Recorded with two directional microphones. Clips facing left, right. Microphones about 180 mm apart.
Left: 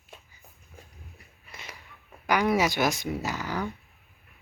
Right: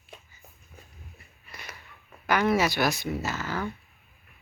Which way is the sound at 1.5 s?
20° left (ahead or behind).